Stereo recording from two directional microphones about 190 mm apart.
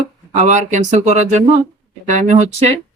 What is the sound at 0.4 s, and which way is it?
Speech, 40° right (ahead or behind).